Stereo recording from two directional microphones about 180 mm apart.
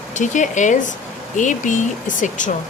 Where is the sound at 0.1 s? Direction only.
45° left (ahead or behind).